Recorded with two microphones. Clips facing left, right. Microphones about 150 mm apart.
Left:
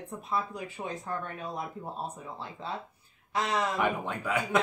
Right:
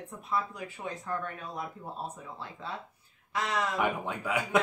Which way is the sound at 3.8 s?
5° right (ahead or behind).